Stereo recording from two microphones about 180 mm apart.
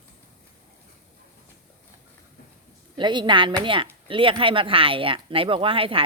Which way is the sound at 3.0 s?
25° right (ahead or behind).